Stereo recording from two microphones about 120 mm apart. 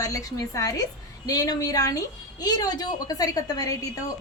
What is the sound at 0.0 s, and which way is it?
A woman's voice, 30° left (ahead or behind).